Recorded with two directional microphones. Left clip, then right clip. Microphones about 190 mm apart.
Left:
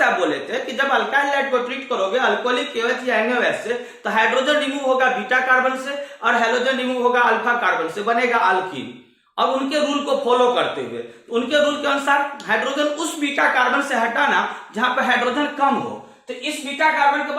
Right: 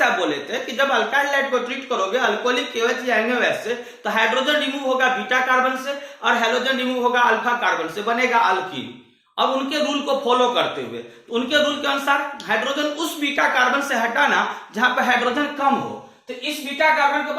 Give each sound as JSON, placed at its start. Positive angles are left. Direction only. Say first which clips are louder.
{"t": 0.0, "sound": "speech", "louder": "left 1 dB", "side_deg": 0}
{"t": 4.0, "sound": "a man's voice", "louder": "left 1 dB", "side_deg": 0}